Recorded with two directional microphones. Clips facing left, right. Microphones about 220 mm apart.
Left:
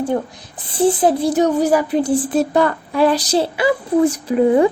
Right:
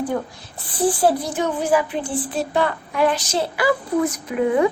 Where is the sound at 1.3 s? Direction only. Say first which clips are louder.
Left 6 dB; 40° left (ahead or behind).